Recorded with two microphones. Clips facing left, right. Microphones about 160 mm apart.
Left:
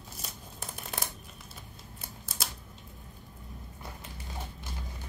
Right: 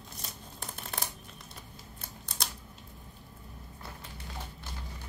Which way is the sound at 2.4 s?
5° left (ahead or behind).